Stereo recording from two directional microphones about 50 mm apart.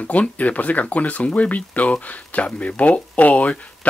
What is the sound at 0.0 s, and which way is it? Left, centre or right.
Speech, left.